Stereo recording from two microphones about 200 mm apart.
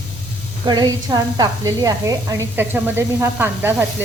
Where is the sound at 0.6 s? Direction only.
20° right (ahead or behind).